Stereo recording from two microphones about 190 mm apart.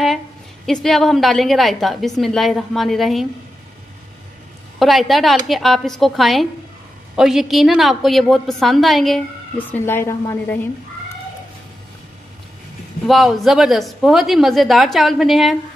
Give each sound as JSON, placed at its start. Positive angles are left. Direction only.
{"t": 0.7, "sound": "a woman's voice", "side_deg": 0}
{"t": 4.7, "sound": "a woman's voice", "side_deg": 0}
{"t": 13.0, "sound": "a woman's voice", "side_deg": 0}